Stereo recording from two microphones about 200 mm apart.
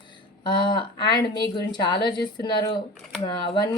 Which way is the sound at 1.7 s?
20° left (ahead or behind).